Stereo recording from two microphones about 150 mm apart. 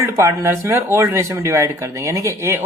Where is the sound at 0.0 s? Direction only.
20° right (ahead or behind).